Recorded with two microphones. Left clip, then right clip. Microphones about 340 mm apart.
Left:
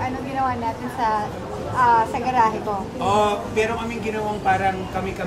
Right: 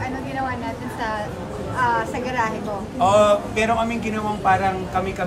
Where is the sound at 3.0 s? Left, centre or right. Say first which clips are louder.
Right 5 dB; centre.